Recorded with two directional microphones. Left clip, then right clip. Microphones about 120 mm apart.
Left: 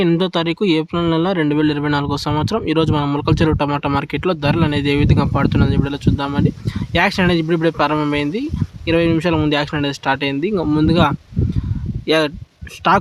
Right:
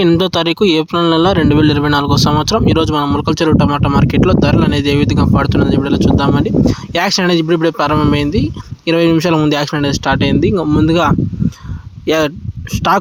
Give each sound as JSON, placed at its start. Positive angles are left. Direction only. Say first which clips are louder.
{"t": 0.2, "sound": "speech", "louder": "right 5 dB", "side_deg": -60}